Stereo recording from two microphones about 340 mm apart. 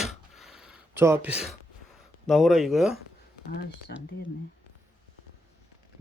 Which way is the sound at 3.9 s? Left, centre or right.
Left.